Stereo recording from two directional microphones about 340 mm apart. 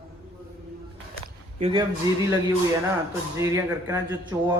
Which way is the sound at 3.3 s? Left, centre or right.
Centre.